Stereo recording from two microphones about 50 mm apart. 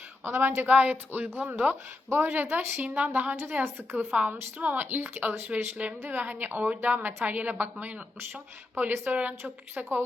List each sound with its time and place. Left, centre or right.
0.3 s a woman's voice: right
0.7 s speech: right
2.0 s speech: right
2.8 s speech: right
8.7 s speech: right